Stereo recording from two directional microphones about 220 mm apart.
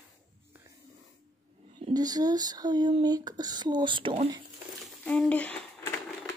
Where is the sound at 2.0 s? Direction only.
15° right (ahead or behind).